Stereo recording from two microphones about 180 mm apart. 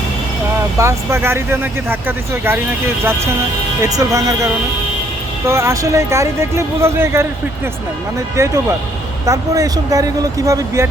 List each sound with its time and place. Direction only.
0.8 s speech: 15° right (ahead or behind)
3.8 s speech: 20° right (ahead or behind)
8.4 s speech: 15° right (ahead or behind)